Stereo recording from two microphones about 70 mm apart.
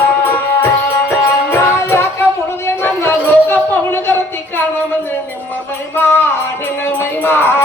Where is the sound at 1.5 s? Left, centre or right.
Left.